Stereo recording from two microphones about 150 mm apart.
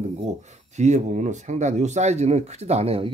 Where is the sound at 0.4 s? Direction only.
50° right (ahead or behind).